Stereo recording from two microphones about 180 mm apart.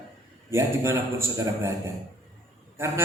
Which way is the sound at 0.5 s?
15° right (ahead or behind).